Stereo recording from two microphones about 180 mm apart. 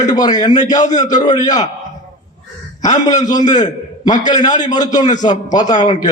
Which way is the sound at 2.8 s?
20° left (ahead or behind).